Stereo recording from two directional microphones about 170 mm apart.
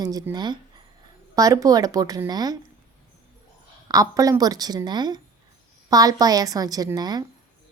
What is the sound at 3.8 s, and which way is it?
A woman's voice, 20° right (ahead or behind).